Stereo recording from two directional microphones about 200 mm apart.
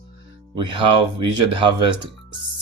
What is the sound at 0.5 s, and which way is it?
Speech, 25° right (ahead or behind).